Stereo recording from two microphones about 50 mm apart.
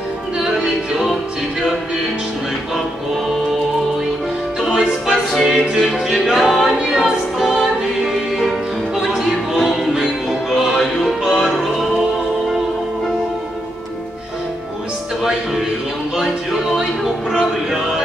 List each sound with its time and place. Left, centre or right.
0.4 s music: centre
4.6 s music: centre
6.7 s music: centre
8.9 s music: centre
9.2 s music: centre
16.7 s music: centre